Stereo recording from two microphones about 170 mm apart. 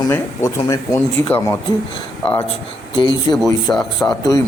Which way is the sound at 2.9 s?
30° left (ahead or behind).